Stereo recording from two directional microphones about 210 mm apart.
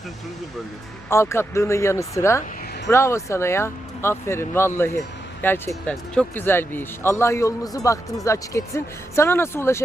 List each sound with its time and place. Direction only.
1.1 s speech: 10° left (ahead or behind)